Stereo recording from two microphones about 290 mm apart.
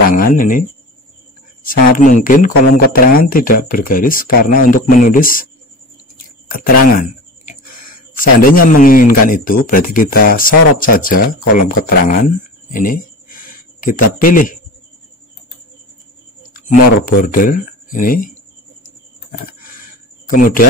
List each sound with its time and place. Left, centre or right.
0.1 s speech: left
6.5 s speech: left
12.7 s a sound: left
16.5 s speech: left
20.2 s speech: left